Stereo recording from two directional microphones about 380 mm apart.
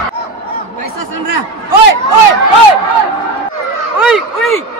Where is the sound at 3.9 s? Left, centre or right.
Centre.